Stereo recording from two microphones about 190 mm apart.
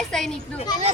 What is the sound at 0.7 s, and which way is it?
Speech, 20° left (ahead or behind).